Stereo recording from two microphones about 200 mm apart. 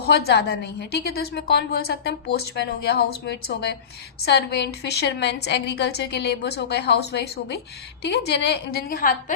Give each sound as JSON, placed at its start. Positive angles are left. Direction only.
{"t": 0.0, "sound": "a woman's voice", "side_deg": 55}